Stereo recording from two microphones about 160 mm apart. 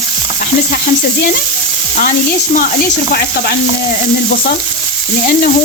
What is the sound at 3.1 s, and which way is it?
Stir, 75° left (ahead or behind).